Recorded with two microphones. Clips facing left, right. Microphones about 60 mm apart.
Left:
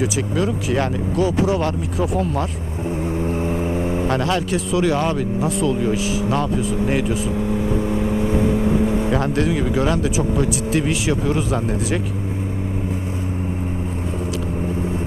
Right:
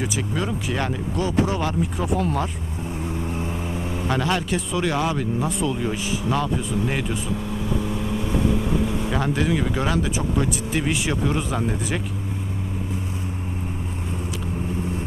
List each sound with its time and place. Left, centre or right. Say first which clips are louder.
0.0 s speech: left 5 dB; centre
3.2 s vehicle: left 6 dB; left
4.1 s speech: right 1 dB; centre
7.3 s vehicle: left 6 dB; left
9.1 s speech: left 4 dB; centre
9.6 s speech: left 4 dB; centre